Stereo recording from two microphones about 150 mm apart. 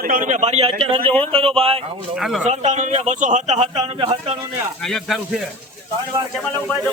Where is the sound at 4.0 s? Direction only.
40° right (ahead or behind).